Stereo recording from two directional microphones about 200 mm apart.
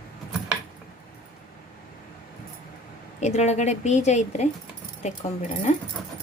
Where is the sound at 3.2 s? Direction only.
35° left (ahead or behind).